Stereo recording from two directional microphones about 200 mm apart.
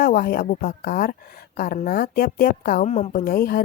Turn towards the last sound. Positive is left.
turn(degrees=50)  # may be behind; listen again after turning